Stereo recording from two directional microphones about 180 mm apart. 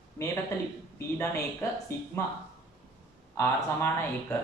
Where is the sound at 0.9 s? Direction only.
15° left (ahead or behind).